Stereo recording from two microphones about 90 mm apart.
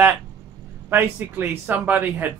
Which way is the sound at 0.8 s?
25° right (ahead or behind).